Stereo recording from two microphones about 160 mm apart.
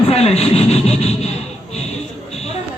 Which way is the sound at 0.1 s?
40° left (ahead or behind).